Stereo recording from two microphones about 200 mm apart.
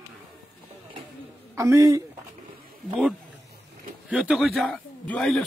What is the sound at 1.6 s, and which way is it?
Speech, 15° right (ahead or behind).